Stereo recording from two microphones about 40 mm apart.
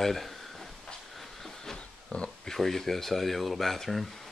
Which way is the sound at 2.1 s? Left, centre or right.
Left.